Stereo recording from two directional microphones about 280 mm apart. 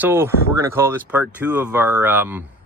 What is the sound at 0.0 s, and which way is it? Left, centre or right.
Speech, centre.